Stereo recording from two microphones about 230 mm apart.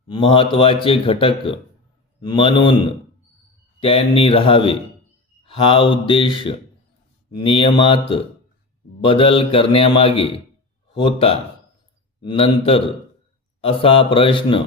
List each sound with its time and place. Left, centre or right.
0.1 s speech: left
3.8 s speech: left